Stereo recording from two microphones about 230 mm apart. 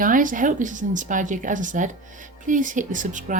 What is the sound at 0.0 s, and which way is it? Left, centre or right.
Speech, right.